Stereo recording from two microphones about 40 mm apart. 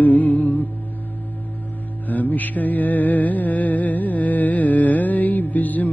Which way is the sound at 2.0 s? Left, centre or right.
Left.